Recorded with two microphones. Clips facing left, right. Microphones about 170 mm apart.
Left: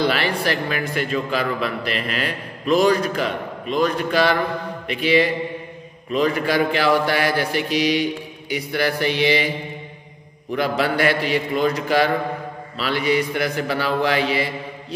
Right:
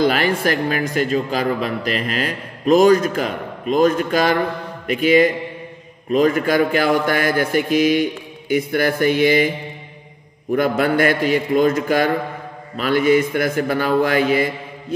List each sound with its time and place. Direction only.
0.0 s a man's voice: 45° right (ahead or behind)
10.5 s a man's voice: 50° right (ahead or behind)